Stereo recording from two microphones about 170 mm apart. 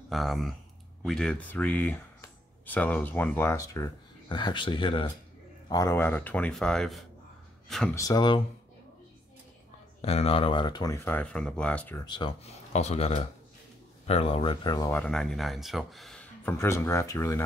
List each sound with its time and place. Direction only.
0.1 s speech: centre (ahead or behind); by 5.1 s 30° left (ahead or behind)
5.7 s speech: 20° left (ahead or behind); by 7.9 s centre (ahead or behind)
7.9 s speech: 20° left (ahead or behind)
10.0 s speech: 35° left (ahead or behind)
11.1 s speech: 5° left (ahead or behind)
12.0 s speech: 25° left (ahead or behind)
15.0 s speech: 5° left (ahead or behind)